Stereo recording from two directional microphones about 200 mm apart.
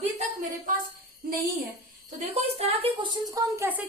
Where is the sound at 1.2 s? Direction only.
45° right (ahead or behind).